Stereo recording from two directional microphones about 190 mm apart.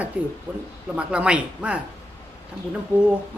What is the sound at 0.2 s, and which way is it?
A man's voice, 5° right (ahead or behind).